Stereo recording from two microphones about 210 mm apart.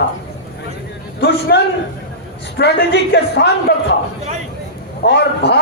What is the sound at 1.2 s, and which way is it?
A man's voice, 50° left (ahead or behind).